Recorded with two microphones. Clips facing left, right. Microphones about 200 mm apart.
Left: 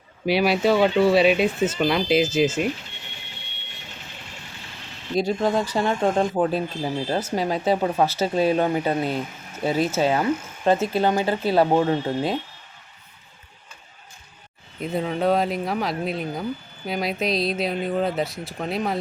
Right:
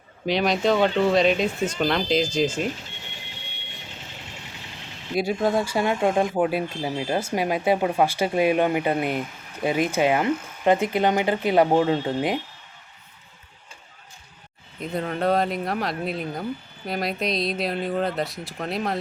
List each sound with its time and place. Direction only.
0.3 s speech: 10° left (ahead or behind)
5.1 s speech: 10° right (ahead or behind)
14.8 s speech: centre (ahead or behind)